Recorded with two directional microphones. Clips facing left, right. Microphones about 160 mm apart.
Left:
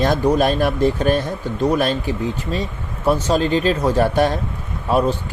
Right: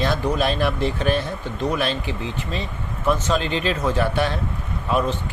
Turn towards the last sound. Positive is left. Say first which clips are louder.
# left 4 dB
turn(degrees=35)  # may be behind; listen again after turning